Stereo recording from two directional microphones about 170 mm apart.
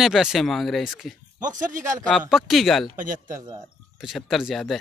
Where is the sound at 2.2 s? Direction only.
Centre (ahead or behind).